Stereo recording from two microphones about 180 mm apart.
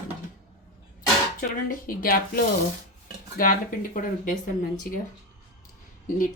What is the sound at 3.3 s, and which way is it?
Speech, 50° left (ahead or behind).